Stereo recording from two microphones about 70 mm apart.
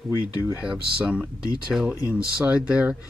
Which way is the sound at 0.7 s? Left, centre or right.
Centre.